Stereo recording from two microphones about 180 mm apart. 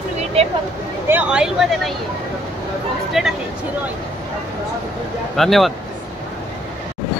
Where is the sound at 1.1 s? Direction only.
5° right (ahead or behind).